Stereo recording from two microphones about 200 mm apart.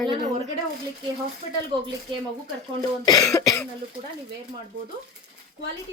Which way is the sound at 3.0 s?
20° left (ahead or behind).